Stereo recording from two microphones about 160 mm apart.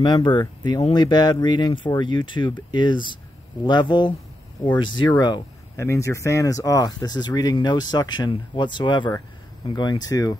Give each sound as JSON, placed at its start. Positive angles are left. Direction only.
{"t": 0.0, "sound": "speech", "side_deg": 30}